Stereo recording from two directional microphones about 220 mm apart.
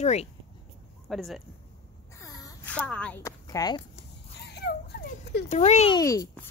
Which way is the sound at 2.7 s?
5° left (ahead or behind).